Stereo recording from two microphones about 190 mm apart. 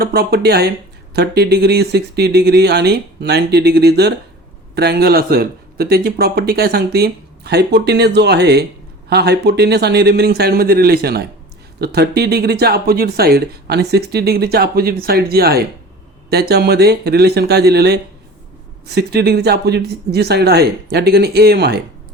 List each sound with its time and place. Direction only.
0.0 s speech: 55° right (ahead or behind)